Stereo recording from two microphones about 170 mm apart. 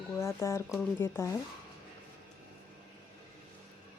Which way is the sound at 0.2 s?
15° left (ahead or behind).